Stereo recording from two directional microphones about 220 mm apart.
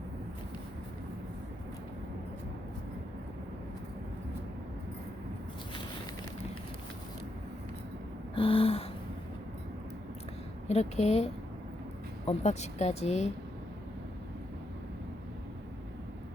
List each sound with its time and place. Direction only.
8.4 s gasp: 25° left (ahead or behind)
10.7 s speech: 30° left (ahead or behind)